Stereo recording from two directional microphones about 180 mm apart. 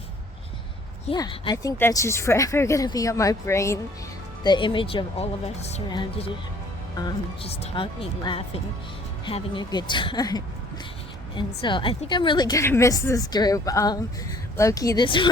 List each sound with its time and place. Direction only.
1.1 s a woman's voice: 20° left (ahead or behind)
4.4 s a woman's voice: 25° left (ahead or behind)
7.4 s a woman's voice: 35° left (ahead or behind)
11.6 s a woman's voice: 25° left (ahead or behind)